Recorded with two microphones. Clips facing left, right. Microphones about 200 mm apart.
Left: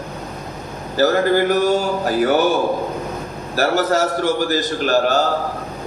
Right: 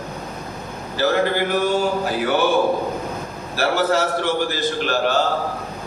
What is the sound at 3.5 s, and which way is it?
A man's voice, 40° left (ahead or behind).